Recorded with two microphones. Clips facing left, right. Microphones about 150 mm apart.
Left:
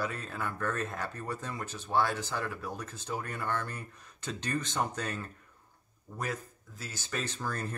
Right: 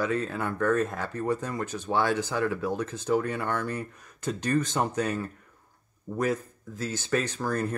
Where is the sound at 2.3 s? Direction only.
90° right; by 3.5 s 65° right (ahead or behind).